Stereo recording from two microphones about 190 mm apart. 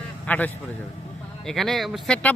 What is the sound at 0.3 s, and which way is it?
A man's voice, 10° left (ahead or behind).